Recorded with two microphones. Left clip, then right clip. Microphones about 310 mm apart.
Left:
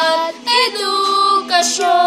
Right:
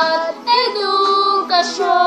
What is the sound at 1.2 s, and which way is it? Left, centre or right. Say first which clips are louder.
Female singing: left 1 dB; left.